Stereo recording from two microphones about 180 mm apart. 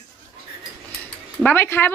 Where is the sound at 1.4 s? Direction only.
10° left (ahead or behind).